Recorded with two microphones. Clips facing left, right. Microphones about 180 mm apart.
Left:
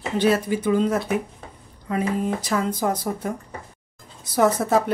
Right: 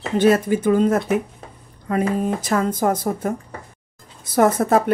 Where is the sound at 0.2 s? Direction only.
50° right (ahead or behind).